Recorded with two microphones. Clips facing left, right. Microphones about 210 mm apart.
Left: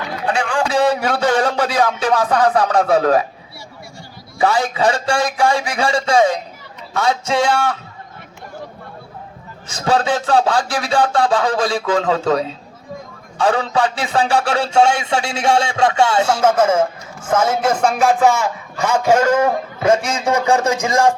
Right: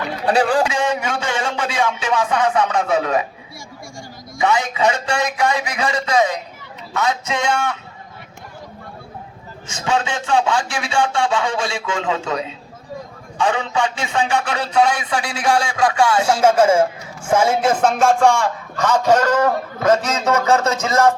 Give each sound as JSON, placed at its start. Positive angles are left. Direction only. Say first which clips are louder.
{"t": 0.3, "sound": "a man's voice", "louder": "right 4 dB", "side_deg": -35}
{"t": 0.7, "sound": "a man's voice", "louder": "left 5 dB", "side_deg": 35}
{"t": 4.4, "sound": "a man's voice", "louder": "left 2 dB", "side_deg": 35}
{"t": 9.6, "sound": "a man's voice", "louder": "left 4 dB", "side_deg": 35}
{"t": 16.2, "sound": "music", "louder": "right 1 dB", "side_deg": -10}
{"t": 17.2, "sound": "a man's voice", "louder": "even", "side_deg": -10}